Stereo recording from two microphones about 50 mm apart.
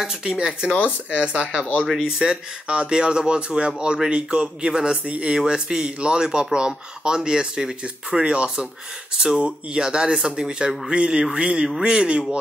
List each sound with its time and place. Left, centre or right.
0.0 s speech: centre
0.7 s speech: left
1.2 s speech: centre